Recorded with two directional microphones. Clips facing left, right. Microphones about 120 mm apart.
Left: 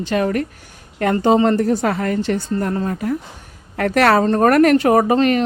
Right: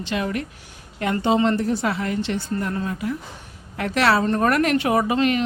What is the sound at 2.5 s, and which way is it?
Speech, 35° left (ahead or behind).